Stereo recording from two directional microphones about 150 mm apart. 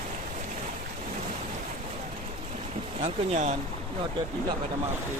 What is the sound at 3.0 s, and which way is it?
Speech, 55° right (ahead or behind).